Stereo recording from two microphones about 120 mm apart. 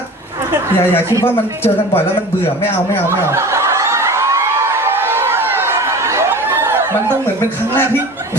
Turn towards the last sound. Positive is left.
turn(degrees=20)  # may be behind; listen again after turning